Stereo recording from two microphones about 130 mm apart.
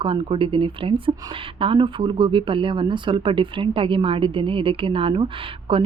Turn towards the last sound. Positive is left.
turn(degrees=-40)  # may be behind; listen again after turning